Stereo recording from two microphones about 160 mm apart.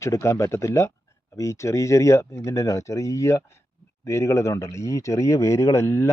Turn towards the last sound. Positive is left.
turn(degrees=15)  # may be behind; listen again after turning